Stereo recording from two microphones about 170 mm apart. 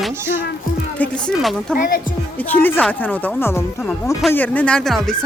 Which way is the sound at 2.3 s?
10° left (ahead or behind).